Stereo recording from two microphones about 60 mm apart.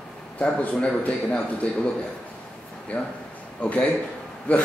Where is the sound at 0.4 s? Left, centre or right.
Left.